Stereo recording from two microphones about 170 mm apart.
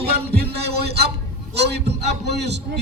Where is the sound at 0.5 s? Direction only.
70° right (ahead or behind).